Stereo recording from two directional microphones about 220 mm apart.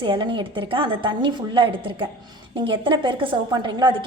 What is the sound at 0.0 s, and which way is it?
A woman's voice, 20° right (ahead or behind).